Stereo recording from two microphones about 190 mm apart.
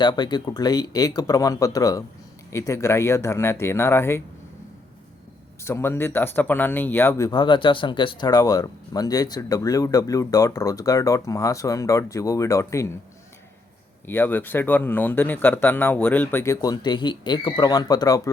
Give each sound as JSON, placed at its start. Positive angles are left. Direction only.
{"t": 0.0, "sound": "speech", "side_deg": 25}
{"t": 5.6, "sound": "speech", "side_deg": 15}
{"t": 14.1, "sound": "speech", "side_deg": 10}